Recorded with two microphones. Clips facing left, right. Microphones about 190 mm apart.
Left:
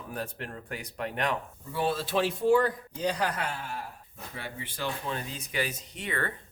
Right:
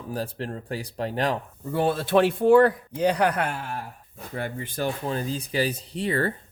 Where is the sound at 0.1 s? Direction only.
30° right (ahead or behind).